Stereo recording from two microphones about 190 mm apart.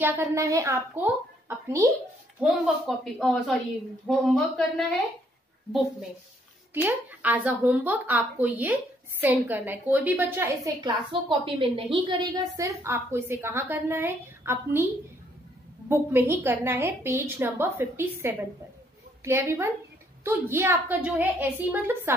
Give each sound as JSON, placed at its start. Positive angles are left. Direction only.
{"t": 0.0, "sound": "a woman's voice", "side_deg": -10}
{"t": 2.4, "sound": "a woman's voice", "side_deg": 0}
{"t": 6.7, "sound": "a woman's voice", "side_deg": -10}
{"t": 15.9, "sound": "a woman's voice", "side_deg": -10}